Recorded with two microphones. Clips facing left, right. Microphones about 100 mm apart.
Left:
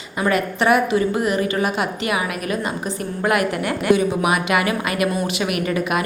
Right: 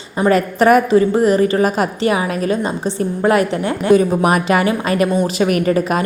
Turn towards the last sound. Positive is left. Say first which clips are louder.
# right 5 dB
turn(degrees=-35)  # may be behind; listen again after turning